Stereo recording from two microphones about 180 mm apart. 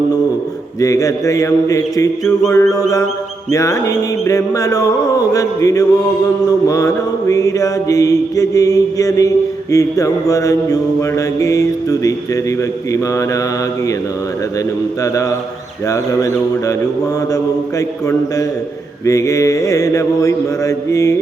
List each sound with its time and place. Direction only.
0.8 s a man's voice: 20° left (ahead or behind)
2.4 s mantra: 15° left (ahead or behind)
15.0 s mantra: 20° left (ahead or behind)